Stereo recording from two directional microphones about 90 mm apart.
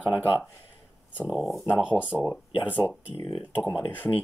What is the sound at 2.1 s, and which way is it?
Speech, 5° left (ahead or behind).